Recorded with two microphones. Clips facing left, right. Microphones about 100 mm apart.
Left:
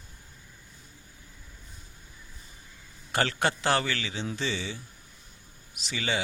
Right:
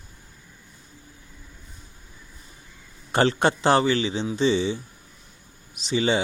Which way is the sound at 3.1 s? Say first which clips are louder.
Right 7 dB; 25° right (ahead or behind).